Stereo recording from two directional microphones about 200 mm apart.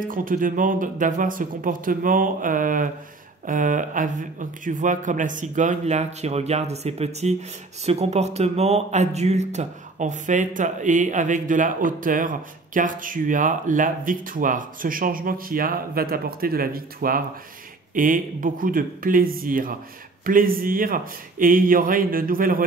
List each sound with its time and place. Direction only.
0.0 s speech: 45° right (ahead or behind)